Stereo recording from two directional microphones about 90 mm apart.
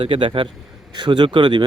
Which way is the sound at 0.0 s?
80° right.